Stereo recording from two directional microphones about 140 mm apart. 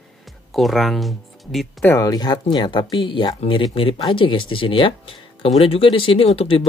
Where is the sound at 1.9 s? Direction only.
25° left (ahead or behind).